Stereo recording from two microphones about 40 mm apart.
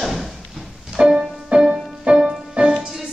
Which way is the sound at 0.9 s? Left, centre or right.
Centre.